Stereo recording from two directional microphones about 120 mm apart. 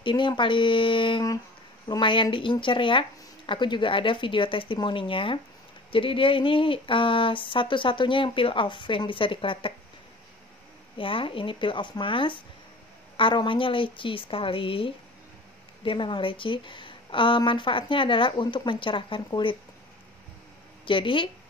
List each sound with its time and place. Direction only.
0.0 s speech: 40° left (ahead or behind)
11.0 s speech: 45° left (ahead or behind)
20.8 s speech: 45° left (ahead or behind)